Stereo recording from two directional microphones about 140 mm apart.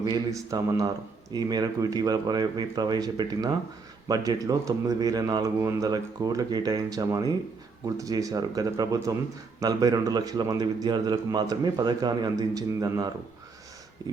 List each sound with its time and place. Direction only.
0.0 s speech: 25° right (ahead or behind)